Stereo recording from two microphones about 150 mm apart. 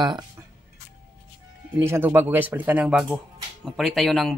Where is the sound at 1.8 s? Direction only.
15° right (ahead or behind); by 4.3 s centre (ahead or behind).